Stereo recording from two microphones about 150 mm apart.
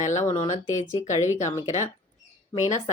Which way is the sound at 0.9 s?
55° left (ahead or behind).